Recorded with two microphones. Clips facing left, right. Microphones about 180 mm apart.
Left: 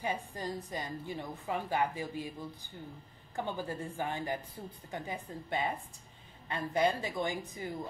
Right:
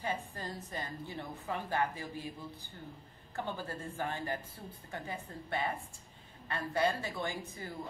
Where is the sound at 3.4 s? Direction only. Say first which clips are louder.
Left 3 dB; 15° left (ahead or behind).